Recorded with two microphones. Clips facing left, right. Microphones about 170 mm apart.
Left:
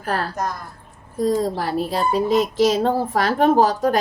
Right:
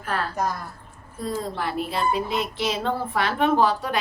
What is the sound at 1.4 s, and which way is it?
Child singing, 35° left (ahead or behind).